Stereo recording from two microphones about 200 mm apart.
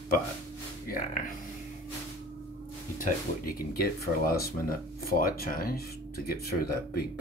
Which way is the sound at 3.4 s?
50° left (ahead or behind).